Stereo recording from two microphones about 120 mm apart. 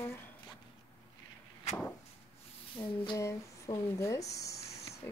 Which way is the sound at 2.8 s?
35° left (ahead or behind).